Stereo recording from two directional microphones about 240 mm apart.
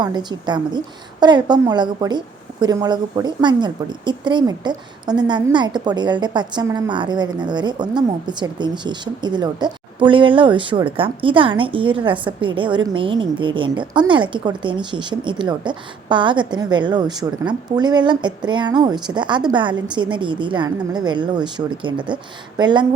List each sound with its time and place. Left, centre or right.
0.0 s a woman's voice: centre